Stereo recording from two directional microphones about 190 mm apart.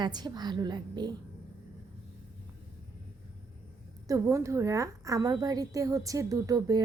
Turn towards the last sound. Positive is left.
turn(degrees=-20)  # may be behind; listen again after turning